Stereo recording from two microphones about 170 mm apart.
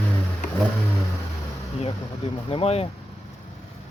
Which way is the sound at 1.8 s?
30° left (ahead or behind).